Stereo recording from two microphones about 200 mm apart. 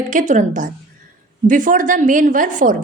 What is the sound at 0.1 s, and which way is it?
A woman's voice, 40° right (ahead or behind).